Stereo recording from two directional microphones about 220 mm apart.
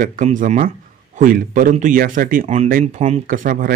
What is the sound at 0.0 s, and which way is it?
Speech, 35° right (ahead or behind).